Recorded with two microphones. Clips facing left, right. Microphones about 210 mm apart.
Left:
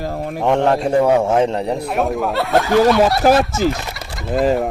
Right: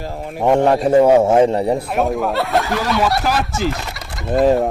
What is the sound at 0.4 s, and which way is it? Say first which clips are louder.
Speech: right 2 dB; 20° right (ahead or behind).